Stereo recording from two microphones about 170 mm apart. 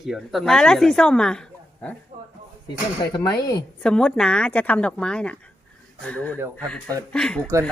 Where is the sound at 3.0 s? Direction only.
25° left (ahead or behind).